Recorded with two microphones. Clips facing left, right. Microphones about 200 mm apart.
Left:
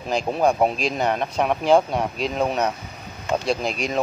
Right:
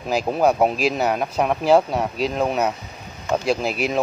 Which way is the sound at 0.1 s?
5° right (ahead or behind).